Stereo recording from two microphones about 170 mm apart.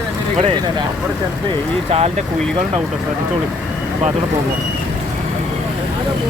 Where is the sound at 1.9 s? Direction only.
35° right (ahead or behind).